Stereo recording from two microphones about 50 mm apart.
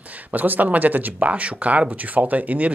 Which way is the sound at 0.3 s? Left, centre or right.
Right.